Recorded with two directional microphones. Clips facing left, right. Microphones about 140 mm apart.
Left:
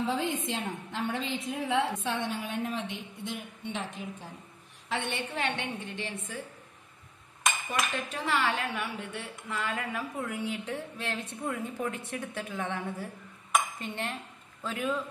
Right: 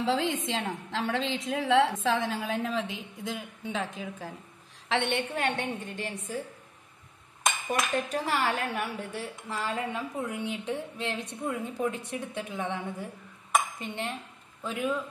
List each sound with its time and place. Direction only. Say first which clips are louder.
0.0 s a woman's voice: right 2 dB; 90° right
4.8 s a woman's voice: right 5 dB; 70° right (ahead or behind)
5.3 s a woman's voice: right 3 dB; 45° right (ahead or behind)
7.6 s a man's voice: right 3 dB; 40° right (ahead or behind); by 15.0 s 15° right (ahead or behind)